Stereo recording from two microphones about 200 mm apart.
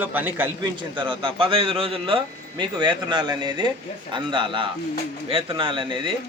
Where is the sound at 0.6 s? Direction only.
25° right (ahead or behind).